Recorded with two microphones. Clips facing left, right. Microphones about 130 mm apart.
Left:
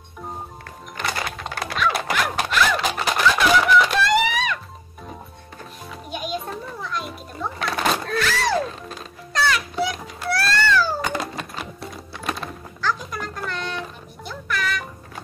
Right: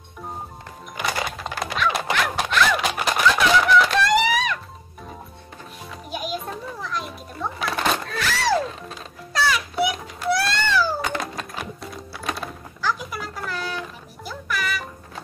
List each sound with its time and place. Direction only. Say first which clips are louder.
1.0 s music: right 1 dB; centre (ahead or behind)
6.0 s children playing: left 1 dB; 5° right (ahead or behind)
9.3 s cat: even; 5° right (ahead or behind)
11.0 s cat: left 1 dB; centre (ahead or behind)
12.1 s music: left 1 dB; centre (ahead or behind)